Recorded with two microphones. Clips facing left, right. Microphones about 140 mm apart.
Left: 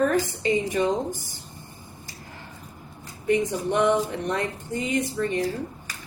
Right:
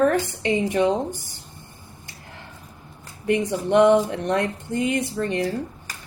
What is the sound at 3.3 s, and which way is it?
A woman's voice, 75° right (ahead or behind).